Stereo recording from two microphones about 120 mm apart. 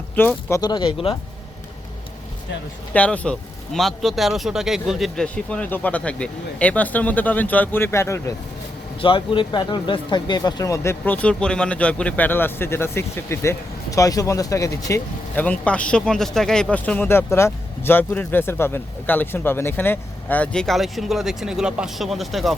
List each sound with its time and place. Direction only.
0.2 s speech: 20° left (ahead or behind)
0.6 s speech: 40° left (ahead or behind)
2.9 s speech: 10° left (ahead or behind)
9.0 s speech: 45° left (ahead or behind); by 15.0 s 25° left (ahead or behind)
15.4 s speech: 10° left (ahead or behind)